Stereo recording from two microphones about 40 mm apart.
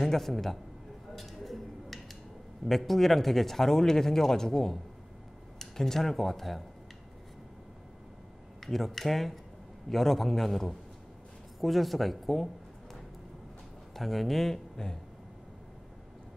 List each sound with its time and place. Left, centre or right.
0.0 s a man's voice: centre
1.1 s a sound: centre
2.6 s speech: centre
8.6 s a man's voice: centre
13.9 s a man's voice: centre
14.8 s speech: centre